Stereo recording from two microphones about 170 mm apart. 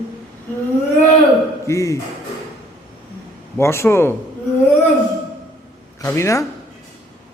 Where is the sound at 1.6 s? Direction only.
20° left (ahead or behind).